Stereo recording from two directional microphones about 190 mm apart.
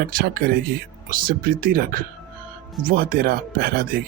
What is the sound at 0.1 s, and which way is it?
Speech, 50° right (ahead or behind).